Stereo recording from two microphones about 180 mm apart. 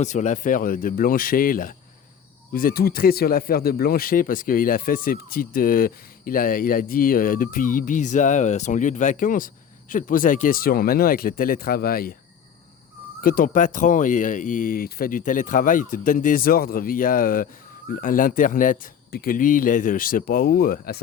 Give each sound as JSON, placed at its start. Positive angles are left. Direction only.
{"t": 0.0, "sound": "speech", "side_deg": 40}
{"t": 13.2, "sound": "speech", "side_deg": 50}